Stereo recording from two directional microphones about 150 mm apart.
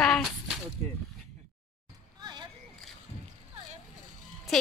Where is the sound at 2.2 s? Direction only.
30° right (ahead or behind).